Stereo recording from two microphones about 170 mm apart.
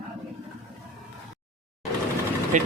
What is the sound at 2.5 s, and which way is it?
Speech, 45° right (ahead or behind).